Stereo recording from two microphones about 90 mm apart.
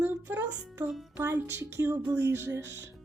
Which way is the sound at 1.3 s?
25° right (ahead or behind).